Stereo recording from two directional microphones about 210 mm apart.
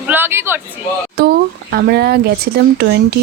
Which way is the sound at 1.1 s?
50° right (ahead or behind).